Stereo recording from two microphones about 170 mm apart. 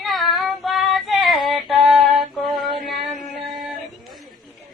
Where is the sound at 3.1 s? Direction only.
55° right (ahead or behind).